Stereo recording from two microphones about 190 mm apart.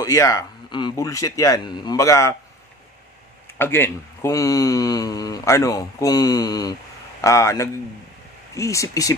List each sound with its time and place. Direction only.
0.0 s a man's voice: 15° left (ahead or behind)
3.5 s a man's voice: 10° left (ahead or behind)